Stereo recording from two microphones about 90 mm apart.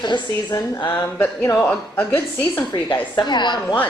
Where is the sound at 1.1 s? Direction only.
25° left (ahead or behind).